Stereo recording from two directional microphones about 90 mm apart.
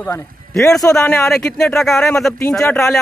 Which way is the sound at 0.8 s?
25° left (ahead or behind).